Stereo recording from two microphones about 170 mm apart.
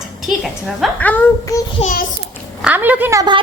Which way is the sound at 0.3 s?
Centre (ahead or behind).